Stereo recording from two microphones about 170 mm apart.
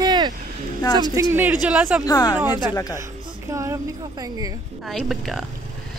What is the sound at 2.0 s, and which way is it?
Speech, 20° left (ahead or behind).